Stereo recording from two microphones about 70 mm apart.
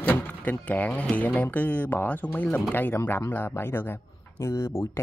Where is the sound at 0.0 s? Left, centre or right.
Left.